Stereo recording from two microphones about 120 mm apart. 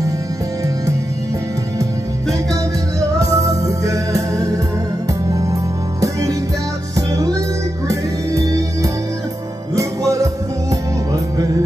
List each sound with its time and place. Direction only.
3.2 s music: 25° right (ahead or behind)